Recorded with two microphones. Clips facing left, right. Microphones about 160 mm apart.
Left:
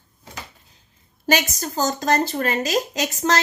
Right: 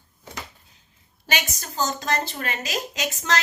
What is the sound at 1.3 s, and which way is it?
A woman's voice, 40° left (ahead or behind).